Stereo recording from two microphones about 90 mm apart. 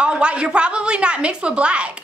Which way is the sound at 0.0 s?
10° right (ahead or behind).